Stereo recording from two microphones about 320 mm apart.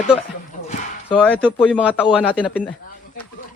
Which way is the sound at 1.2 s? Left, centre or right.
Centre.